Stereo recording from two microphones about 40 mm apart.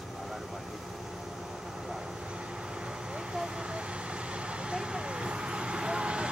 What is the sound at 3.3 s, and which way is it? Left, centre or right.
Vehicle, centre.